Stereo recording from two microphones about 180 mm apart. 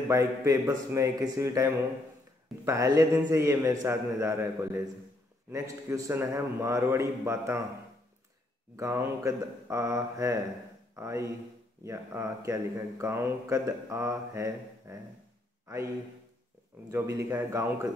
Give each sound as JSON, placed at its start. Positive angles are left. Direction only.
{"t": 0.1, "sound": "a man's voice", "side_deg": -20}
{"t": 5.5, "sound": "speech", "side_deg": -15}
{"t": 8.7, "sound": "speech", "side_deg": -15}
{"t": 15.6, "sound": "a sound", "side_deg": -15}
{"t": 16.9, "sound": "speech", "side_deg": -15}